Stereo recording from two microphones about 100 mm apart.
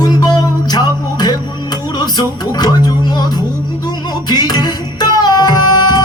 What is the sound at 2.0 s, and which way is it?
Speech, 45° left (ahead or behind).